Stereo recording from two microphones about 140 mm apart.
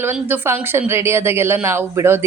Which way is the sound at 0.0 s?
15° right (ahead or behind).